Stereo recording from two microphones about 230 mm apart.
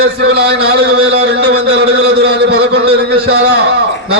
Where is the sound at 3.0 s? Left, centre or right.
Right.